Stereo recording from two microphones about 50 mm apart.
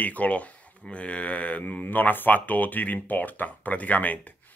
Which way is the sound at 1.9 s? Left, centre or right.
Left.